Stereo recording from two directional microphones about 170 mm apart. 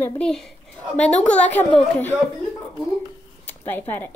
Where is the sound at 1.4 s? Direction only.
10° left (ahead or behind).